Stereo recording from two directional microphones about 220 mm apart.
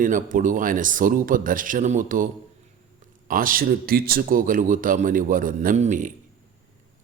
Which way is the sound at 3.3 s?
40° right (ahead or behind).